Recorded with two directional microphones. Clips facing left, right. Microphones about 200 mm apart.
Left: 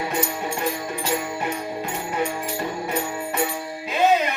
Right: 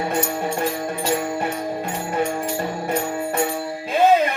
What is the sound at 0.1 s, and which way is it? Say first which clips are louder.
Speech: right 3 dB; 50° right (ahead or behind).